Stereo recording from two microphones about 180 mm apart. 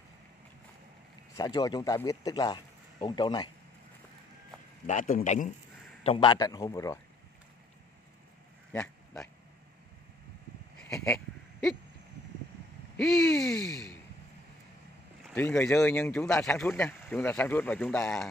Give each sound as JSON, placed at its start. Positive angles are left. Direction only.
{"t": 1.3, "sound": "a man's voice", "side_deg": 20}
{"t": 4.8, "sound": "a man's voice", "side_deg": 45}
{"t": 6.0, "sound": "a man's voice", "side_deg": 25}
{"t": 8.7, "sound": "a sound", "side_deg": 5}
{"t": 12.9, "sound": "speech", "side_deg": 5}
{"t": 15.2, "sound": "speech", "side_deg": 5}